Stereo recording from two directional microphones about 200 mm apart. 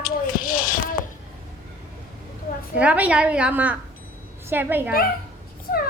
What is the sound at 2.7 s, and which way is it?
A woman's voice, 5° right (ahead or behind).